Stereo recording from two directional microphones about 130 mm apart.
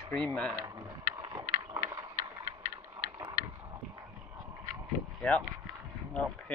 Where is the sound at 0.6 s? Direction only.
25° right (ahead or behind).